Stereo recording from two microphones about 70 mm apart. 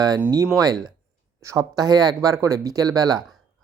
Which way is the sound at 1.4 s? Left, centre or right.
Right.